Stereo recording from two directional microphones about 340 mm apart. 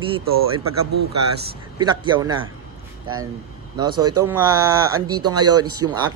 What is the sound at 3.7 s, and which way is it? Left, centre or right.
Speech, centre.